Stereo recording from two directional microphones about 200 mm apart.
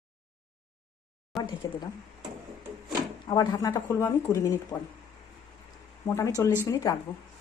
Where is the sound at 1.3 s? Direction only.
Centre (ahead or behind).